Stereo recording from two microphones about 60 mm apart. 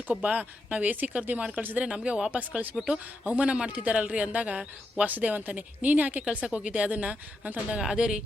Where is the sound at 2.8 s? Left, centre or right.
Centre.